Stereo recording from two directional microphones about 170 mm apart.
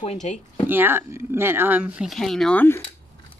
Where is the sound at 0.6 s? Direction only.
10° right (ahead or behind); by 2.8 s 10° left (ahead or behind).